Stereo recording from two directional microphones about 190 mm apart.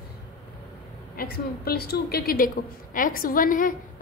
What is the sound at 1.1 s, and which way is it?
A woman's voice, 50° left (ahead or behind).